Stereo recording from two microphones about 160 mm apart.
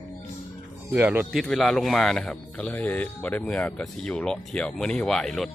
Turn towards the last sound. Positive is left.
turn(degrees=5)  # may be behind; listen again after turning